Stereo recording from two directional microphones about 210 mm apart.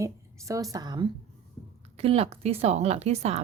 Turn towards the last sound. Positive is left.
turn(degrees=-30)  # may be behind; listen again after turning